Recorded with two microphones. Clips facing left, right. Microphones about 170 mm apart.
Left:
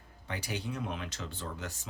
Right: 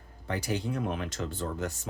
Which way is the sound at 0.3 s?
45° right (ahead or behind).